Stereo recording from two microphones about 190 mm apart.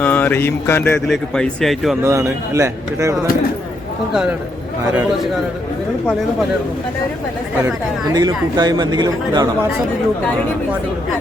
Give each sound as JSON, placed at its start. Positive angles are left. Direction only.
{"t": 0.0, "sound": "mantra", "side_deg": 10}
{"t": 1.0, "sound": "speech", "side_deg": 0}
{"t": 2.0, "sound": "speech", "side_deg": -15}
{"t": 4.1, "sound": "speech", "side_deg": -5}
{"t": 8.1, "sound": "speech", "side_deg": -20}